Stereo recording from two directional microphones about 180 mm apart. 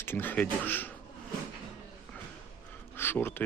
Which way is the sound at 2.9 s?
10° left (ahead or behind).